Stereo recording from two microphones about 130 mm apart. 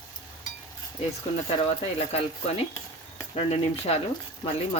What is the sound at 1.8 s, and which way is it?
Speech, 50° left (ahead or behind).